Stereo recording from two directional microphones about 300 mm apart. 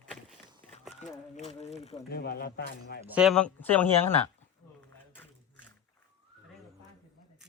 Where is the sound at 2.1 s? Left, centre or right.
Left.